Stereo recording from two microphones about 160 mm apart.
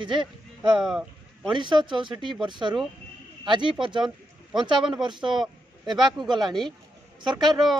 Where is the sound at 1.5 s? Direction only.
30° right (ahead or behind).